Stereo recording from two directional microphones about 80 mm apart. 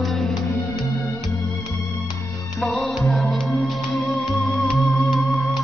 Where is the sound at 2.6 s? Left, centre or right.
Centre.